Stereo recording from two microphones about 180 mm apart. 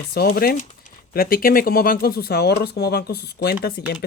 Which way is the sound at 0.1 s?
60° left (ahead or behind).